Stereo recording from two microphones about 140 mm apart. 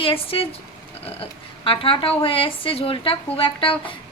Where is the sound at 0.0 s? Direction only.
40° left (ahead or behind).